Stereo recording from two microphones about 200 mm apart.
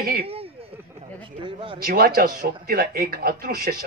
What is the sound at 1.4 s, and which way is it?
Speech, 25° right (ahead or behind).